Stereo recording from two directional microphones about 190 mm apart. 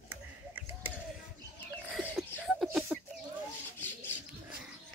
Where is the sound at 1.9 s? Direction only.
5° right (ahead or behind).